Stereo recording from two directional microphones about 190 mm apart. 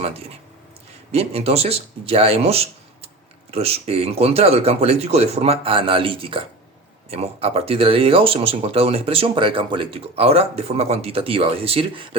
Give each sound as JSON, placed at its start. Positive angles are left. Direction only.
{"t": 0.0, "sound": "speech", "side_deg": -30}